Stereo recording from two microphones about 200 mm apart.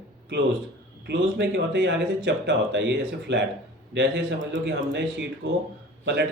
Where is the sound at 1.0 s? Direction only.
55° right (ahead or behind).